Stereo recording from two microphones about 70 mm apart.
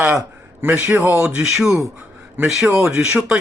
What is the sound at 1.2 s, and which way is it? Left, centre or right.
Speech, centre.